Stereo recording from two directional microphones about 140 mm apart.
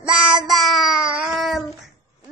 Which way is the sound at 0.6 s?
Centre (ahead or behind).